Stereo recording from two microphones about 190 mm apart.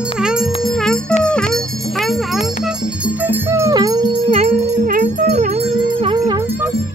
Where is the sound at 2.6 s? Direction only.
5° right (ahead or behind); by 5.6 s 40° right (ahead or behind).